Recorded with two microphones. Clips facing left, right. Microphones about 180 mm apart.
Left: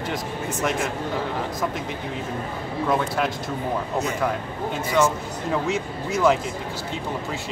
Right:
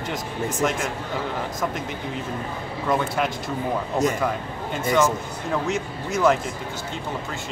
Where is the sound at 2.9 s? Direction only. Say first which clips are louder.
Right 1 dB; centre (ahead or behind).